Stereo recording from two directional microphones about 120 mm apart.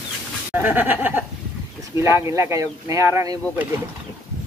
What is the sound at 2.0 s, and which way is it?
Speech, 25° right (ahead or behind).